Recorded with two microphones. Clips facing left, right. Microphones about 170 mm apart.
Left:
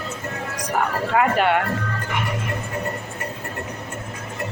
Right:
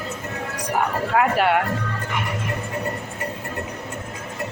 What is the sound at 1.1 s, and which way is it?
Speech, 5° right (ahead or behind).